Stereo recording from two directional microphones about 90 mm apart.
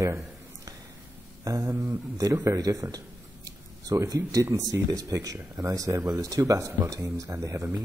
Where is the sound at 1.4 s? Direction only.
40° right (ahead or behind).